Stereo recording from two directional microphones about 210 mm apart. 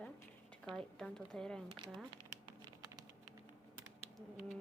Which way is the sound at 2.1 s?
20° right (ahead or behind).